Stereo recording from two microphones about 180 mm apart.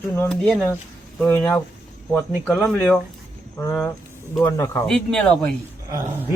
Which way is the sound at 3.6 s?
20° left (ahead or behind).